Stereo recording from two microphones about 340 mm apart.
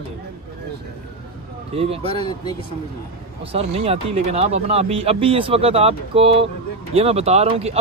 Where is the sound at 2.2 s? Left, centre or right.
Centre.